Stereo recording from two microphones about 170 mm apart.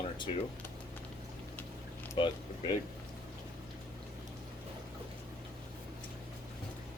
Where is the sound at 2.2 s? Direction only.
30° left (ahead or behind).